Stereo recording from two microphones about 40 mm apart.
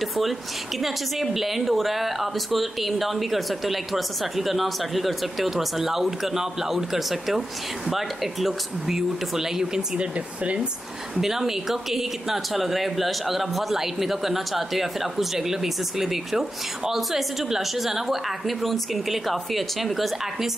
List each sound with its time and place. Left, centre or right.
0.8 s speech: centre
9.9 s speech: right
11.1 s speech: centre